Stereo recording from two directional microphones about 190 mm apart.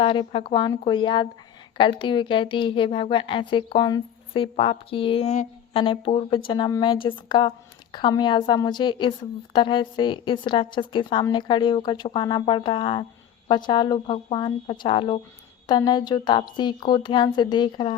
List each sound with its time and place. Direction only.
0.0 s a woman's voice: 25° left (ahead or behind)